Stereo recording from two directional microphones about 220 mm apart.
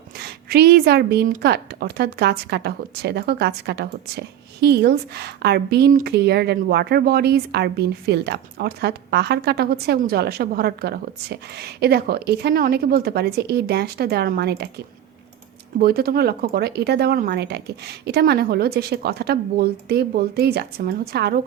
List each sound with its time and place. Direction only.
0.2 s a woman's voice: 45° right (ahead or behind)
15.8 s a woman's voice: 45° right (ahead or behind)